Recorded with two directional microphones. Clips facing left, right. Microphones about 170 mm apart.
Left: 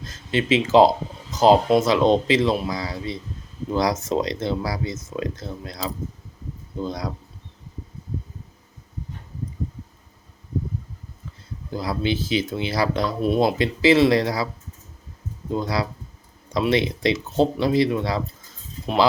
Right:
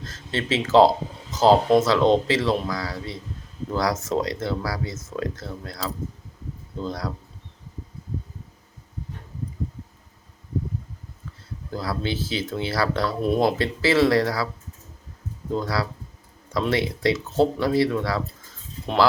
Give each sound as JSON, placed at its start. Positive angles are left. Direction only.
{"t": 0.0, "sound": "speech", "side_deg": 15}
{"t": 1.3, "sound": "a sound", "side_deg": 15}
{"t": 1.8, "sound": "speech", "side_deg": 15}
{"t": 11.7, "sound": "speech", "side_deg": 15}
{"t": 15.5, "sound": "speech", "side_deg": 20}